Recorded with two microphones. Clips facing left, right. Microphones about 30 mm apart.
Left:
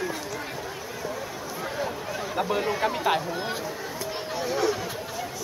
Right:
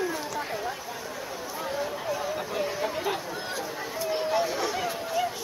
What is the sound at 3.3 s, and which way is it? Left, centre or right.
Speech, centre.